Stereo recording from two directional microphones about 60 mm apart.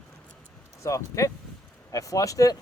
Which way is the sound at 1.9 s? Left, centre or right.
Left.